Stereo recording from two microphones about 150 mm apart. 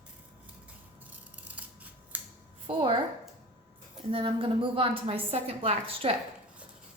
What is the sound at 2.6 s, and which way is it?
Speech, 35° right (ahead or behind).